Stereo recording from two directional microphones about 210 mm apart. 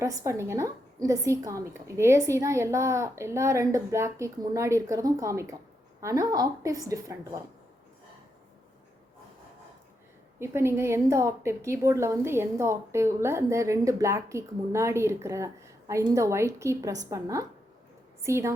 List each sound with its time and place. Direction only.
0.0 s a woman's voice: 15° right (ahead or behind)
10.4 s a woman's voice: 10° right (ahead or behind)